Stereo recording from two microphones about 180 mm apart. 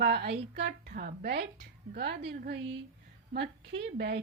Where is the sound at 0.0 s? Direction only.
65° right (ahead or behind).